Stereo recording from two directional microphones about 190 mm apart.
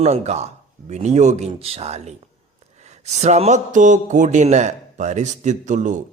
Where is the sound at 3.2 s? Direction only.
35° right (ahead or behind).